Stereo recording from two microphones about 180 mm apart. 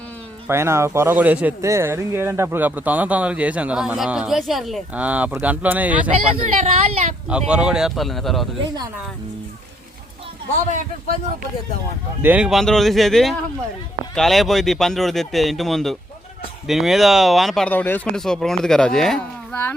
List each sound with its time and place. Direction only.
0.4 s speech: 15° right (ahead or behind)
6.3 s speech: 45° right (ahead or behind)
7.3 s speech: 5° right (ahead or behind)
12.2 s speech: 5° right (ahead or behind)